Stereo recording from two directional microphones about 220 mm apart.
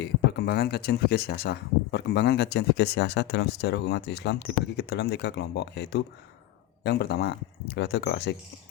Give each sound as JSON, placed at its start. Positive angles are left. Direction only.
{"t": 0.0, "sound": "speech", "side_deg": 50}